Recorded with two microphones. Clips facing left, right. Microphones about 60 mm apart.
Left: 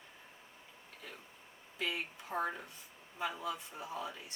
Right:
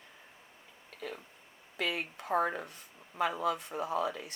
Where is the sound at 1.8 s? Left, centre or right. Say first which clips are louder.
Right 4 dB; right.